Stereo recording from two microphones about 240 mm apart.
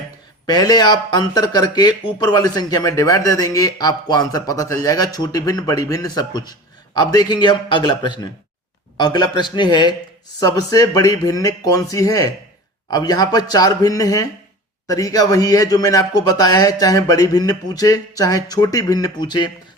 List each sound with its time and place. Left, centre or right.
0.4 s speech: centre